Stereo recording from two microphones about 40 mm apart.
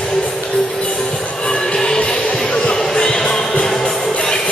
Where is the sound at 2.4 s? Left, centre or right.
Left.